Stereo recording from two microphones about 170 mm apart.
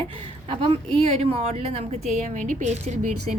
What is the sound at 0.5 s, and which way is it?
A woman's voice, 30° right (ahead or behind).